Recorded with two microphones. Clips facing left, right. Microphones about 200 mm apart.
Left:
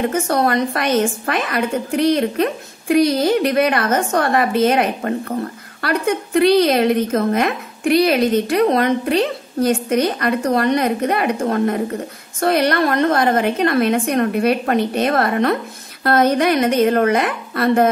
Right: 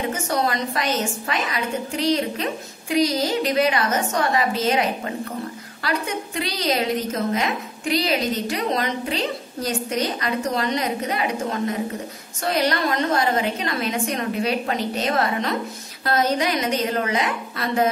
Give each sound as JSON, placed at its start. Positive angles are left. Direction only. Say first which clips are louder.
{"t": 0.1, "sound": "a woman's voice", "louder": "left 6 dB", "side_deg": 55}